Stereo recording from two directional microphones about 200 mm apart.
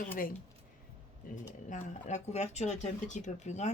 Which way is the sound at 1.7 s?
35° left (ahead or behind).